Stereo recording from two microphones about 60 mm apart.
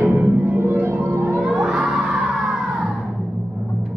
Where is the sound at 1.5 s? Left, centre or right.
Centre.